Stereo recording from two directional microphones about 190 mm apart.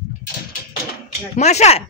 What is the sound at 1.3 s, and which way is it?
Speech, 35° left (ahead or behind).